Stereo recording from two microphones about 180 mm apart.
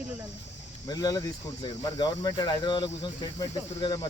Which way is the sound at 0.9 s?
20° left (ahead or behind).